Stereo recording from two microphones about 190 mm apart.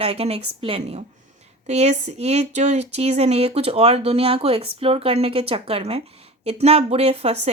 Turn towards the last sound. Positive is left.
turn(degrees=-30)  # may be behind; listen again after turning